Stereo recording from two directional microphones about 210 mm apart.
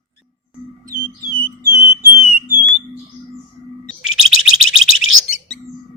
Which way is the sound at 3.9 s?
Centre (ahead or behind).